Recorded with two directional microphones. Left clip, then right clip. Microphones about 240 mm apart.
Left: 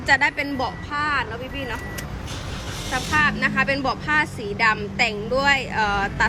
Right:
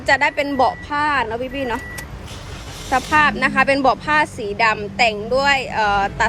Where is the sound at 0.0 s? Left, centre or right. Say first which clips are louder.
Right 3 dB; centre.